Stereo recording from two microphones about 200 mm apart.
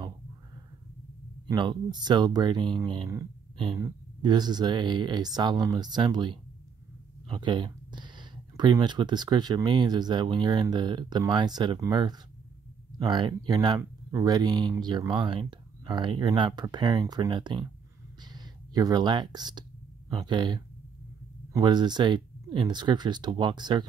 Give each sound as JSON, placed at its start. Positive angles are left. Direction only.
{"t": 1.5, "sound": "speech", "side_deg": -25}